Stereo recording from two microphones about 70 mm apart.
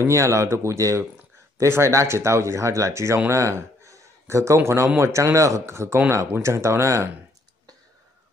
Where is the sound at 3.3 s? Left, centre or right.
Right.